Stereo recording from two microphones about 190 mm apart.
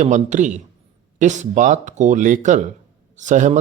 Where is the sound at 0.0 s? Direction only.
40° right (ahead or behind).